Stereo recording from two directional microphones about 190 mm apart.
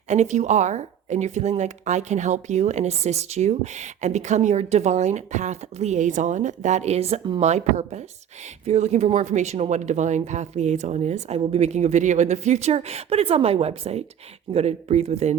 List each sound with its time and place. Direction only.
0.1 s a woman's voice: 35° right (ahead or behind)